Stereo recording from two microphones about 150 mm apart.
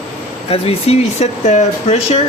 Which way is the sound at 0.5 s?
40° left (ahead or behind).